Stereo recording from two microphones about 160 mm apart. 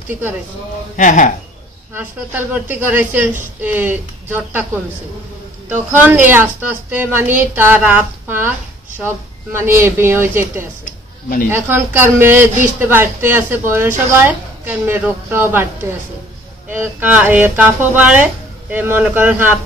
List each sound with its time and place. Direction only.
0.9 s speech: 50° left (ahead or behind)
2.0 s a man's voice: 10° right (ahead or behind)
5.7 s a man's voice: 10° right (ahead or behind)
16.7 s a man's voice: 10° right (ahead or behind)